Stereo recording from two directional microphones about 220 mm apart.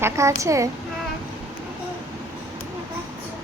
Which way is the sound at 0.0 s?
15° right (ahead or behind).